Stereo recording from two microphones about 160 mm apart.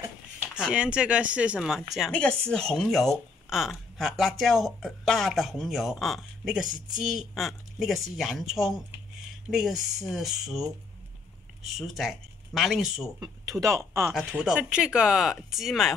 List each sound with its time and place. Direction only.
0.4 s speech: 5° right (ahead or behind)
13.2 s speech: 20° right (ahead or behind)
14.1 s speech: 5° right (ahead or behind)